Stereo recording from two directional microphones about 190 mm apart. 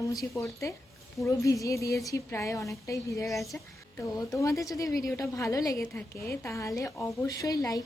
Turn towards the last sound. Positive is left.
turn(degrees=20)  # may be behind; listen again after turning